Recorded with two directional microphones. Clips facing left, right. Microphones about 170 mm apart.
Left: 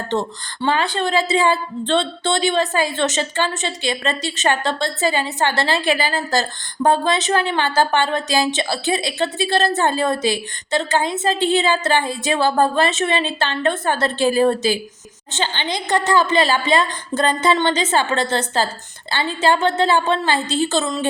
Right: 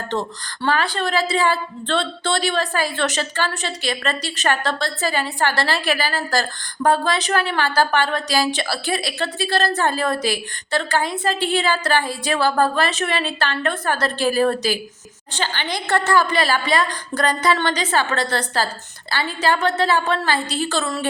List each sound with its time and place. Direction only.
0.1 s a woman's voice: 25° left (ahead or behind)